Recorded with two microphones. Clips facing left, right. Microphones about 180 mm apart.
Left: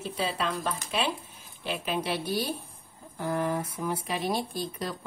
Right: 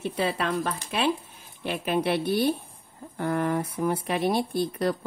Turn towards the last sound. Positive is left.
turn(degrees=-60)  # may be behind; listen again after turning